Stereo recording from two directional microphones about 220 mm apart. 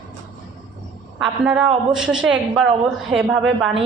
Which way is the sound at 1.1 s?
Centre (ahead or behind).